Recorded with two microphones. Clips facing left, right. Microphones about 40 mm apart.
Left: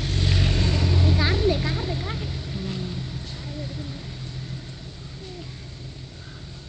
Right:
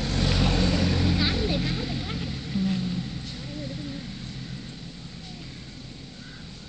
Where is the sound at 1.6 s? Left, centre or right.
Centre.